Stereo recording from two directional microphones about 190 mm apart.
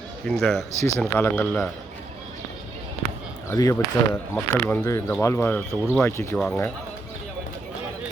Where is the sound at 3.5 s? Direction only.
15° left (ahead or behind).